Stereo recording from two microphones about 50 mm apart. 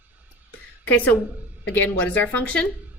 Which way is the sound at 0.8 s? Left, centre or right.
Left.